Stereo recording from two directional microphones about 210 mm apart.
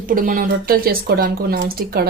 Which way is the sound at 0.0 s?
40° right (ahead or behind).